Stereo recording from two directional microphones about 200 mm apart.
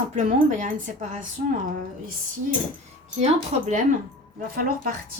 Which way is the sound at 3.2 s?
35° right (ahead or behind).